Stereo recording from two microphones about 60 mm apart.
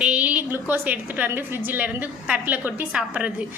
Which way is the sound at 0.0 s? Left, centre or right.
Right.